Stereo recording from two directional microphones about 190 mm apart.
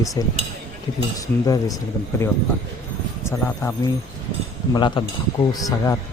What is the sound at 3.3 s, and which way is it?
Speech, 10° left (ahead or behind).